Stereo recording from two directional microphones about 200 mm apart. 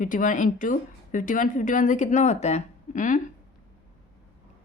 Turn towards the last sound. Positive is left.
turn(degrees=40)  # may be behind; listen again after turning